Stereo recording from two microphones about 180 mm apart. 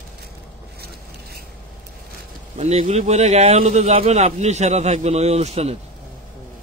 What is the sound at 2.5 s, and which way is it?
A man's voice, 40° right (ahead or behind).